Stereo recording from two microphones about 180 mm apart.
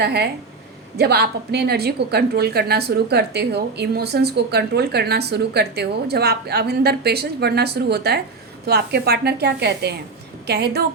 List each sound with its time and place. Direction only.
0.0 s a woman's voice: 65° right (ahead or behind)